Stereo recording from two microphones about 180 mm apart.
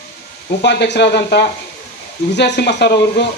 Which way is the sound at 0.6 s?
70° left (ahead or behind).